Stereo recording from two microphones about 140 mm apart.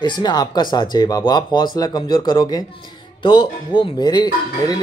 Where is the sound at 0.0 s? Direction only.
30° left (ahead or behind).